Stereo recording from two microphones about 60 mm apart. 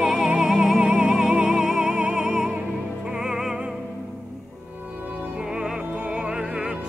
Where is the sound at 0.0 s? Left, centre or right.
Centre.